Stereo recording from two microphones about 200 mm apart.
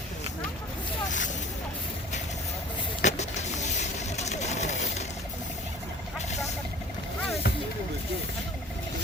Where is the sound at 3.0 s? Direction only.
35° left (ahead or behind).